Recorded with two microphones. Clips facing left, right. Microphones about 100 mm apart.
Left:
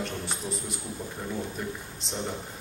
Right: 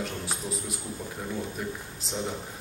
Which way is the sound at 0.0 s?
Centre (ahead or behind).